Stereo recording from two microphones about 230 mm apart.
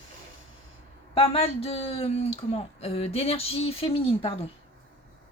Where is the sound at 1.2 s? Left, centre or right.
Left.